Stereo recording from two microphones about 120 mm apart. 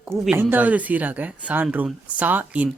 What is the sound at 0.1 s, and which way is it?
Speech, 20° right (ahead or behind).